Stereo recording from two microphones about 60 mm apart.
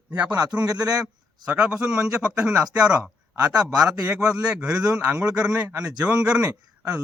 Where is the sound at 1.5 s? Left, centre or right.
Centre.